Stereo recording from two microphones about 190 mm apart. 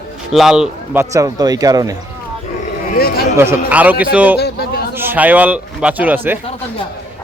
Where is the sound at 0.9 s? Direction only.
15° right (ahead or behind).